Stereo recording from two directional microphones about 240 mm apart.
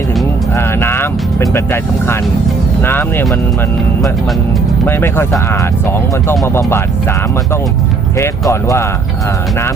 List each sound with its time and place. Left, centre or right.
0.5 s speech: centre
4.9 s speech: centre
8.2 s speech: centre